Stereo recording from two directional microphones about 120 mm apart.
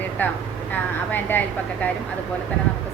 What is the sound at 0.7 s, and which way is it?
Speech, 15° left (ahead or behind).